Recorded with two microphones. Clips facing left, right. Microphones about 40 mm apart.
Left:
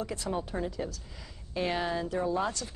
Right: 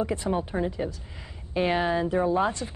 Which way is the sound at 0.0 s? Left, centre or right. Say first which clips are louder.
Right 6 dB; right.